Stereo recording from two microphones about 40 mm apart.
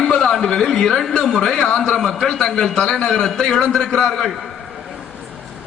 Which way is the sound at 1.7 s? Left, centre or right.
Left.